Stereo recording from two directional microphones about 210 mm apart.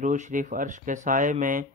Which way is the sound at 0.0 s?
35° right (ahead or behind).